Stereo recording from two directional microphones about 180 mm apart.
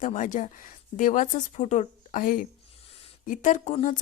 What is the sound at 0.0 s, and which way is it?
A woman's voice, 45° left (ahead or behind).